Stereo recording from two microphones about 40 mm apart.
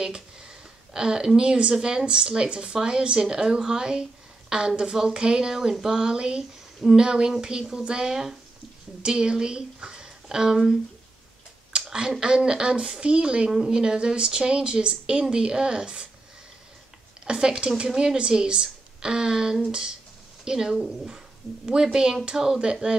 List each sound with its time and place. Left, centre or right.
0.0 s a woman's voice: centre
11.7 s a sound: right
12.1 s a woman's voice: centre
17.2 s a woman's voice: right